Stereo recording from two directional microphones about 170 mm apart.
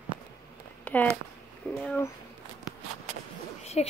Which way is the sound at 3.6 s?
40° left (ahead or behind).